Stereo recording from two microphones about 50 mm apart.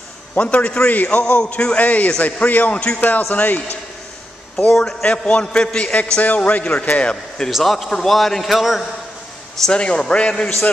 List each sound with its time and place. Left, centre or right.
0.3 s a man's voice: left
3.0 s a man's voice: left
4.6 s a man's voice: centre; by 6.9 s left
7.0 s a man's voice: centre
7.5 s a man's voice: centre
9.7 s a man's voice: centre